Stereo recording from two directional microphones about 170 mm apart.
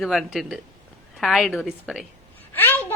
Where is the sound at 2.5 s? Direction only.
10° left (ahead or behind).